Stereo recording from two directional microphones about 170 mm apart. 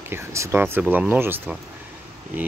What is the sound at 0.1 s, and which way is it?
Speech, 15° right (ahead or behind).